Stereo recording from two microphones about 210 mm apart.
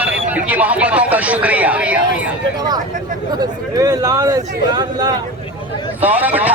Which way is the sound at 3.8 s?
15° right (ahead or behind).